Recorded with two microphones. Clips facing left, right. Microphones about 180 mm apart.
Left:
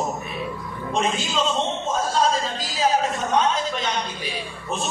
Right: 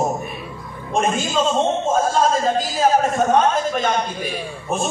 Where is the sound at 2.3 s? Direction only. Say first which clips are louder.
Right 7 dB; 50° right (ahead or behind).